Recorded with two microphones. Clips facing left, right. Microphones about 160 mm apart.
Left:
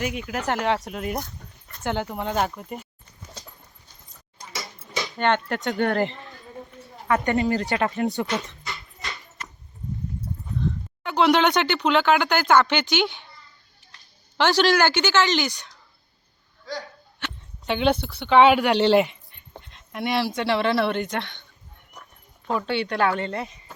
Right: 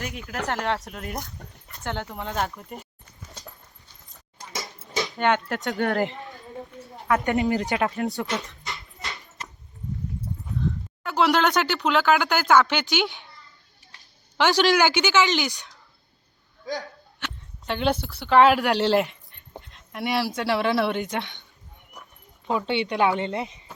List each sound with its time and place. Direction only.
0.0 s speech: centre (ahead or behind)
5.1 s speech: 5° right (ahead or behind)
6.8 s a sound: centre (ahead or behind)
7.8 s speech: centre (ahead or behind)
11.0 s speech: 5° right (ahead or behind)
14.3 s a woman's voice: 10° right (ahead or behind)
17.2 s speech: centre (ahead or behind)
22.4 s speech: 20° right (ahead or behind)